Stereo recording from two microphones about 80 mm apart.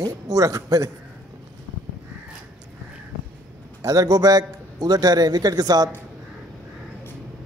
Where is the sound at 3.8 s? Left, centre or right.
Right.